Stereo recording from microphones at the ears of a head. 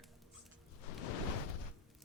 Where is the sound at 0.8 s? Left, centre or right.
Left.